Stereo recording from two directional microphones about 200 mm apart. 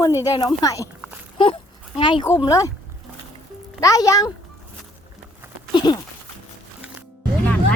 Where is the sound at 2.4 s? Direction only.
15° left (ahead or behind).